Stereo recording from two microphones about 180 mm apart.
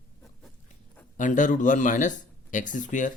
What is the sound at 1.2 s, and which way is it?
Speech, 45° left (ahead or behind).